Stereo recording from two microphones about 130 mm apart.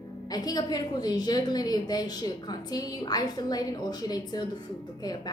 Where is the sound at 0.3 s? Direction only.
30° left (ahead or behind).